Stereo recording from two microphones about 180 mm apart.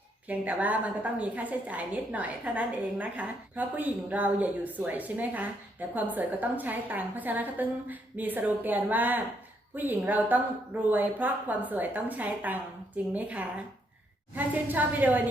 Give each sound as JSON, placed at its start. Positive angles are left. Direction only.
{"t": 0.3, "sound": "a woman's voice", "side_deg": -10}